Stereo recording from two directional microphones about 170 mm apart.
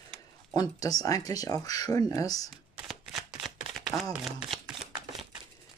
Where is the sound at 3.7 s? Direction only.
Centre (ahead or behind).